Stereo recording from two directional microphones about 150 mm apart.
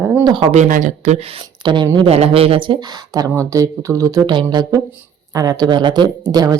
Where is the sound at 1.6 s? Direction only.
30° right (ahead or behind).